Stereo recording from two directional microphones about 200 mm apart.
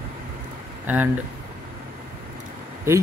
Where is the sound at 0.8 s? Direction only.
10° right (ahead or behind).